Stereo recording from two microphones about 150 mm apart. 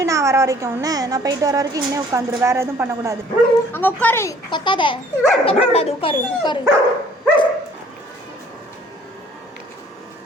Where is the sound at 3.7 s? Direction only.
10° left (ahead or behind).